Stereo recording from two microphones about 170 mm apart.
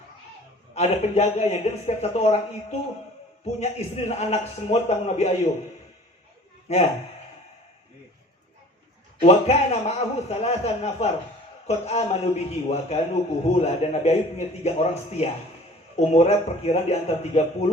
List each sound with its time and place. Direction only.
0.7 s a man's voice: 40° left (ahead or behind)
6.7 s a man's voice: 40° left (ahead or behind)
9.2 s a man's voice: 40° left (ahead or behind)